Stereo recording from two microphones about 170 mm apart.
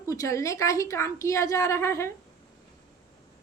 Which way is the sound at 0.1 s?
20° left (ahead or behind).